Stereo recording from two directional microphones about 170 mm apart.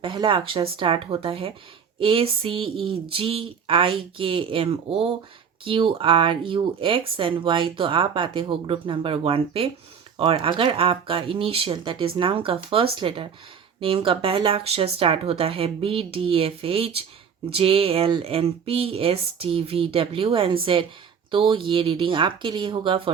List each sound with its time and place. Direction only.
0.0 s speech: 30° right (ahead or behind)